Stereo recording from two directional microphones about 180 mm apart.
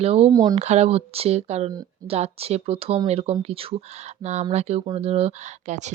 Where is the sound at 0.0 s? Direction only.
35° right (ahead or behind).